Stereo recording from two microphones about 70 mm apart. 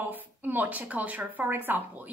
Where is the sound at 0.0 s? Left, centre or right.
Right.